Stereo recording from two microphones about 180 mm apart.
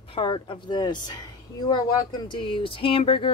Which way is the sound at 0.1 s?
30° left (ahead or behind).